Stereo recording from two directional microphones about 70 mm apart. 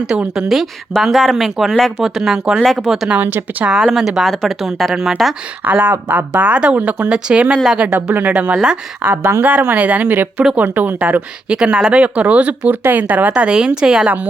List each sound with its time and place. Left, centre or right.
0.1 s speech: centre
3.2 s speech: right
3.9 s speech: centre
5.6 s speech: right
9.4 s speech: right
11.4 s speech: centre